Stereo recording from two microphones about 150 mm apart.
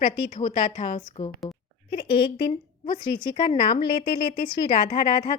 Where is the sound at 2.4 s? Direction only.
35° left (ahead or behind).